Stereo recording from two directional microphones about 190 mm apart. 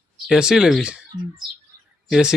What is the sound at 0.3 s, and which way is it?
Speech, 5° right (ahead or behind).